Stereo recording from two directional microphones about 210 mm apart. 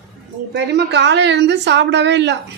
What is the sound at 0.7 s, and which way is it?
A woman's voice, 55° right (ahead or behind).